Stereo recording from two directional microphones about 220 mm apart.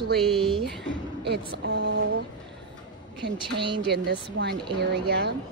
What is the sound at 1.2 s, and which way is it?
Speech, 50° right (ahead or behind).